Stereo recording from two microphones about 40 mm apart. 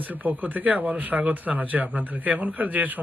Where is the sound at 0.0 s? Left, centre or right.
Right.